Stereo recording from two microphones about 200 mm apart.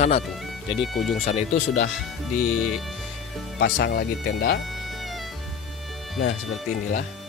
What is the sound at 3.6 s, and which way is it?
Speech, 60° left (ahead or behind).